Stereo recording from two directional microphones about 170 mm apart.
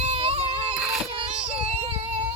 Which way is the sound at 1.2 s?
35° right (ahead or behind).